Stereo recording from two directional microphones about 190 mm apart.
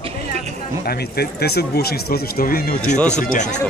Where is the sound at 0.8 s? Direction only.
55° left (ahead or behind).